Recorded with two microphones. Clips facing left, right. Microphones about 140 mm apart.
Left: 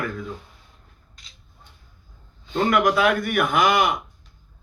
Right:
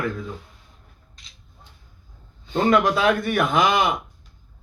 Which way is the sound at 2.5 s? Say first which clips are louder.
Right 1 dB; 25° right (ahead or behind).